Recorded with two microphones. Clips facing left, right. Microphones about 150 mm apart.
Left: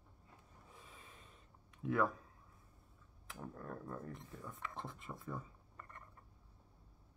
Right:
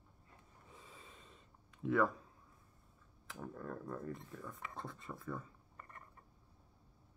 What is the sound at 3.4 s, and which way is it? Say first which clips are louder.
Speech: right 2 dB; centre (ahead or behind).